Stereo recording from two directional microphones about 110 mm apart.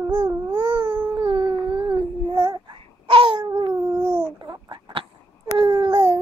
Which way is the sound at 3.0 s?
55° right (ahead or behind).